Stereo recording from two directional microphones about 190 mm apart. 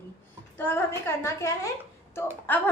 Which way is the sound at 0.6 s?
10° left (ahead or behind).